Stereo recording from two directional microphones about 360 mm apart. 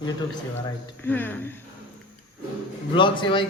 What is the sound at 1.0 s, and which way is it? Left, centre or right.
Speech, centre.